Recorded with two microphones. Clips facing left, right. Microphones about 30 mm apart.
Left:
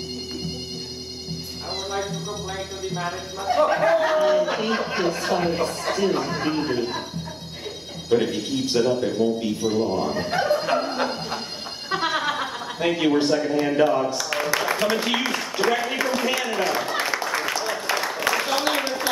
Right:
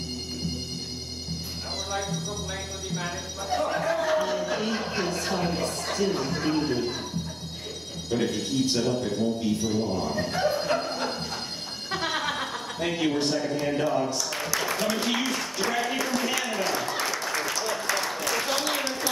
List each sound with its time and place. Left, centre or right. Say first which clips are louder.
1.9 s music: left 3 dB; centre
3.4 s speech: left 7 dB; left
4.1 s a sound: left 6 dB; centre
4.6 s speech: left 5 dB; left
8.1 s speech: left 5 dB; centre
10.4 s music: left 4 dB; centre
11.9 s a sound: left 5 dB; centre; by 15.0 s left
15.0 s speech: left 3 dB; centre
16.0 s a sound: left 4 dB; left